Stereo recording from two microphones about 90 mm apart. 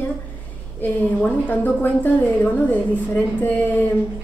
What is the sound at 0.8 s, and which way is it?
A woman's voice, 20° left (ahead or behind).